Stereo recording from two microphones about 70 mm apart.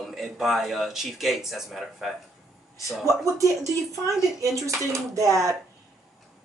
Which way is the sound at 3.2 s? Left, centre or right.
Right.